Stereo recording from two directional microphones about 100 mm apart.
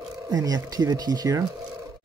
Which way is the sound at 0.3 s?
35° right (ahead or behind).